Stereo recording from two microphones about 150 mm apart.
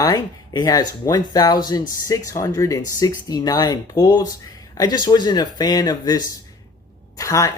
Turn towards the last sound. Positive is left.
turn(degrees=20)  # may be behind; listen again after turning